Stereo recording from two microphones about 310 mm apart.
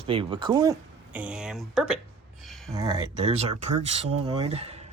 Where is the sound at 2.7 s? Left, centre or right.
Centre.